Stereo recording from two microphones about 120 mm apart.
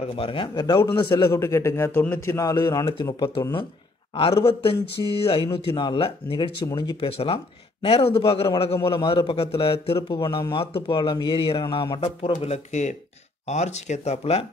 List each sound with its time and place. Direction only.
0.0 s a man's voice: 50° left (ahead or behind); by 0.8 s 35° left (ahead or behind)
1.0 s a man's voice: 25° left (ahead or behind); by 6.5 s 50° left (ahead or behind)
6.6 s speech: 30° left (ahead or behind)
7.1 s a man's voice: 55° left (ahead or behind)
12.4 s speech: 70° left (ahead or behind)